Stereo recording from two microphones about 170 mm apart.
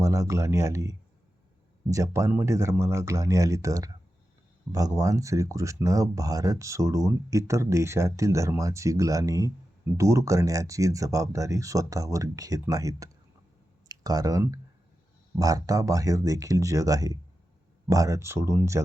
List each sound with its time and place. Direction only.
0.0 s speech: 20° right (ahead or behind)